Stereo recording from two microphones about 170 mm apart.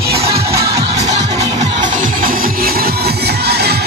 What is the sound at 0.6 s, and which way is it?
Music, 20° right (ahead or behind).